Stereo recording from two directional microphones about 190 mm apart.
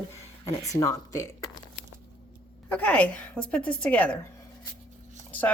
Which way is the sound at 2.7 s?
5° left (ahead or behind).